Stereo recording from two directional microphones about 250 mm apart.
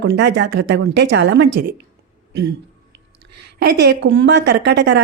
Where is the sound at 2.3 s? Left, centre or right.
Right.